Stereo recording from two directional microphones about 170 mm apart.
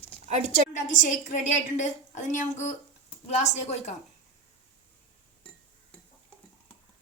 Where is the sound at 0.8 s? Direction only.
45° left (ahead or behind).